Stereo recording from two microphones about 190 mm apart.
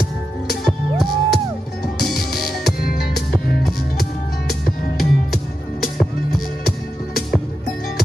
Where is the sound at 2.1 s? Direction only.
55° left (ahead or behind).